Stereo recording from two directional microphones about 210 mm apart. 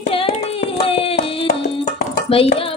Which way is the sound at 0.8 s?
25° left (ahead or behind).